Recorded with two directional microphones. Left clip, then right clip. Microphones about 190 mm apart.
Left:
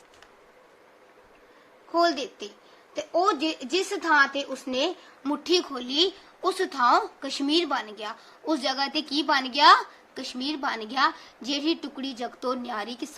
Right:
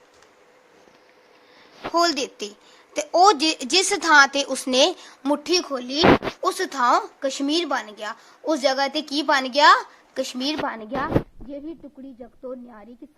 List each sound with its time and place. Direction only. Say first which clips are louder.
1.9 s a woman's voice: right 3 dB; 60° right (ahead or behind)
5.5 s speech: right 2 dB; 30° right (ahead or behind)